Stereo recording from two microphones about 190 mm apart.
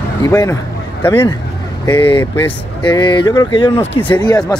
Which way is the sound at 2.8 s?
20° left (ahead or behind).